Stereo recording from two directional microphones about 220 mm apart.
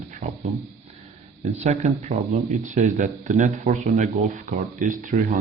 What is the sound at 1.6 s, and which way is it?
Speech, 30° right (ahead or behind).